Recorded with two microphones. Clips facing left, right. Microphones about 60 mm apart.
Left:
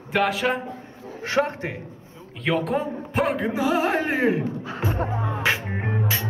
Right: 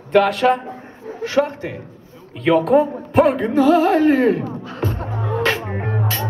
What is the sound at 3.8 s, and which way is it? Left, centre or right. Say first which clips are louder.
Music: right 8 dB; left.